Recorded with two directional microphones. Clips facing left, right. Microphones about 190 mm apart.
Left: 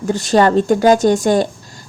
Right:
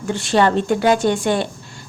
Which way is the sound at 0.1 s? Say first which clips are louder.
Left 4 dB; 40° left (ahead or behind).